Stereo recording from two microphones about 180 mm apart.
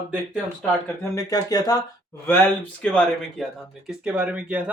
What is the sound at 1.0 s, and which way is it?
Speech, 20° left (ahead or behind).